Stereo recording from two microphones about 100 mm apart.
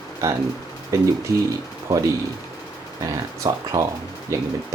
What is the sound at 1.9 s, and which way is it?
Speech, 35° right (ahead or behind).